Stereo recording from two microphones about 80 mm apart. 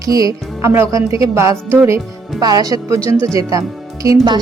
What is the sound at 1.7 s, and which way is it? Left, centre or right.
Speech, right.